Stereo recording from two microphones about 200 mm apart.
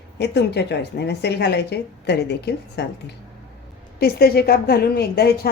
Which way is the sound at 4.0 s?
50° left (ahead or behind).